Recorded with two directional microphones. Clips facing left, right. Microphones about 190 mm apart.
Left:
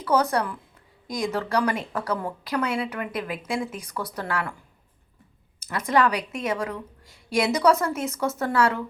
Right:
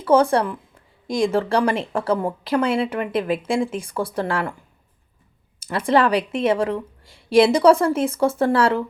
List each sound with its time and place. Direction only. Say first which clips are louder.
0.0 s speech: right 6 dB; 25° right (ahead or behind)
5.5 s speech: right 4 dB; 30° right (ahead or behind)